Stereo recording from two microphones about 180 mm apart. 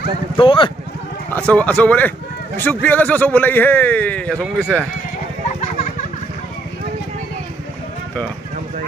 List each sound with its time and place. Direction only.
0.4 s speech: 30° left (ahead or behind)
1.3 s speech: 10° left (ahead or behind)